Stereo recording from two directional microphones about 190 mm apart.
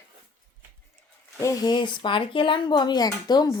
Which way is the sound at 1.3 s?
15° left (ahead or behind).